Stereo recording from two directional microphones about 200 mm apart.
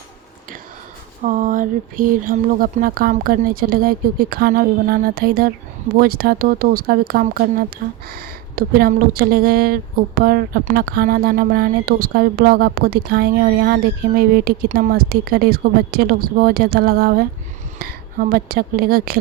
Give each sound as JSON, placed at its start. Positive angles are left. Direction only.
{"t": 1.2, "sound": "speech", "side_deg": -40}